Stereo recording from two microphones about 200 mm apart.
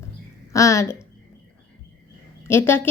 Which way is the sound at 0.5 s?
15° left (ahead or behind).